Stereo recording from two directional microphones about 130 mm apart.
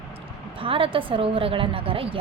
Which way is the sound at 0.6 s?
45° right (ahead or behind).